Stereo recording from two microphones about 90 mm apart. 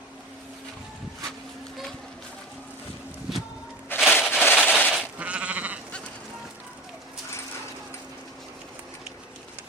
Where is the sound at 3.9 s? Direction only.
20° left (ahead or behind).